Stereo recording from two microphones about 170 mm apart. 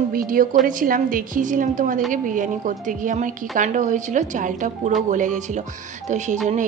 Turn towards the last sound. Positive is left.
turn(degrees=-45)  # may be behind; listen again after turning